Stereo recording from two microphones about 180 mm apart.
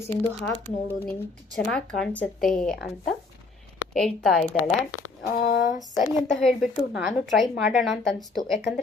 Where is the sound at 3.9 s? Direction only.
Centre (ahead or behind).